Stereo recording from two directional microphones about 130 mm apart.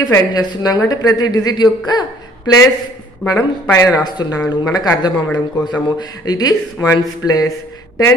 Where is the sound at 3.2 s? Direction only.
20° left (ahead or behind).